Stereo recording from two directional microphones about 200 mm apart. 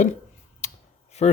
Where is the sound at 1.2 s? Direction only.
35° left (ahead or behind).